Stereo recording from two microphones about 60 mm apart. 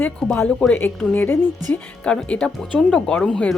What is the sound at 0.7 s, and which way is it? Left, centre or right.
Speech, left.